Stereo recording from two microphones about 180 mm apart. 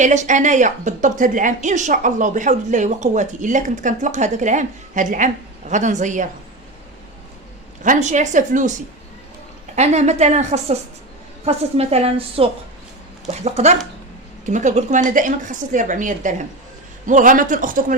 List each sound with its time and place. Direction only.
0.0 s a woman's voice: 40° right (ahead or behind)
7.9 s a woman's voice: 40° right (ahead or behind)
9.7 s a woman's voice: 40° right (ahead or behind)